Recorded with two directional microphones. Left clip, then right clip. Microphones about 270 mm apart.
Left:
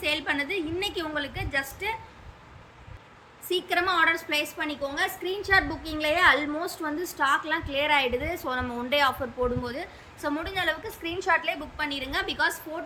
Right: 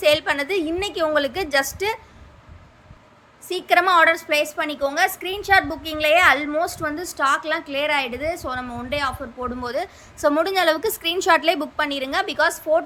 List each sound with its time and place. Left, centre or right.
0.0 s a woman's voice: centre
3.5 s a woman's voice: centre
9.6 s a woman's voice: centre
11.8 s a woman's voice: centre